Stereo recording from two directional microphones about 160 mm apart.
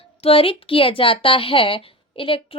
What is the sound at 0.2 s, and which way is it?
A woman's voice, 35° left (ahead or behind).